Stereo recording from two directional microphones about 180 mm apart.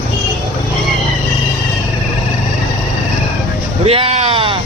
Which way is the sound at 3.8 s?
30° right (ahead or behind).